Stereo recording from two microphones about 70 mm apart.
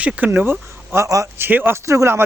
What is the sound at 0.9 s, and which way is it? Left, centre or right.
Speech, right.